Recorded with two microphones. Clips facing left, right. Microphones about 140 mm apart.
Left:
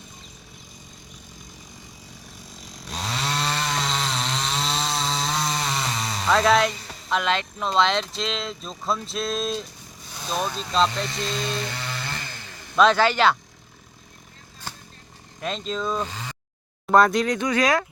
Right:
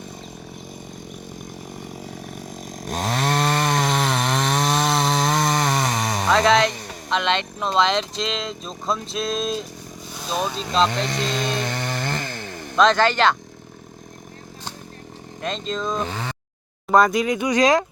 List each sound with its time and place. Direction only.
1.7 s chainsaw: 65° right (ahead or behind)
6.3 s speech: centre (ahead or behind)
10.8 s chainsaw: 55° right (ahead or behind)
12.7 s speech: 5° left (ahead or behind)
15.4 s speech: 5° left (ahead or behind)
16.0 s speech: 65° right (ahead or behind)
16.9 s speech: centre (ahead or behind); by 17.8 s 20° right (ahead or behind)